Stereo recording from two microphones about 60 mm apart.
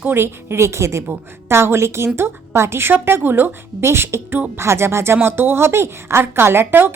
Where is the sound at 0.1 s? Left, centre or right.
Right.